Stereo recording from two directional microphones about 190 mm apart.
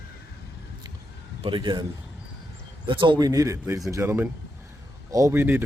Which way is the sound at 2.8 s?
25° right (ahead or behind).